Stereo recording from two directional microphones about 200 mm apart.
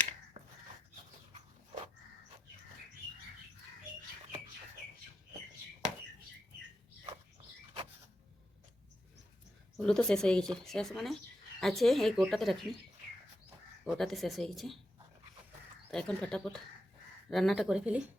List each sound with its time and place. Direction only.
0.4 s a sound: 25° right (ahead or behind)
9.7 s speech: 5° left (ahead or behind)
13.8 s speech: centre (ahead or behind)
15.9 s speech: 5° left (ahead or behind)